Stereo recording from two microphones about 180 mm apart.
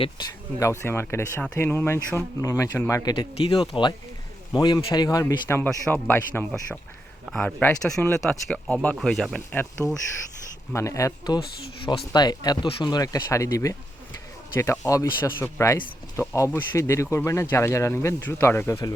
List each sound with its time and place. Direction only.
0.3 s speech: 15° left (ahead or behind)